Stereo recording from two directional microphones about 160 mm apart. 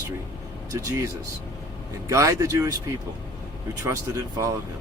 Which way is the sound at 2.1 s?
20° right (ahead or behind).